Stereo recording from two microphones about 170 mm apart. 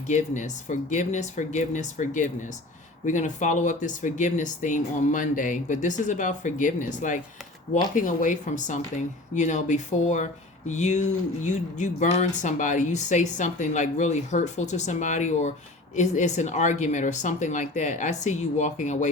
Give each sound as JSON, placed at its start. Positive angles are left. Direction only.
{"t": 0.1, "sound": "speech", "side_deg": 45}